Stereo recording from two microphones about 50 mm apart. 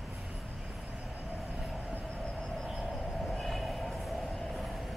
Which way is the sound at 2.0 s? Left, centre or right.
Centre.